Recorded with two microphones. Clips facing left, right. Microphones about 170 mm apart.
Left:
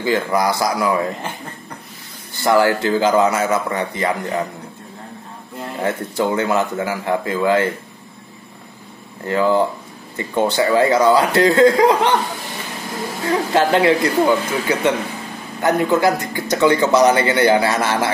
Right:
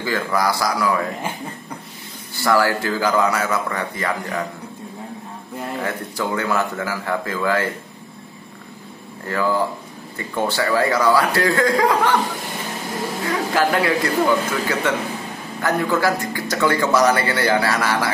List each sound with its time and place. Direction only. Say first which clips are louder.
0.0 s speech: left 3 dB; 20° left (ahead or behind)
2.4 s speech: left 3 dB; 20° left (ahead or behind)
5.8 s speech: left 7 dB; 25° left (ahead or behind)
9.3 s speech: left 4 dB; 20° left (ahead or behind)
13.3 s speech: left 4 dB; 25° left (ahead or behind)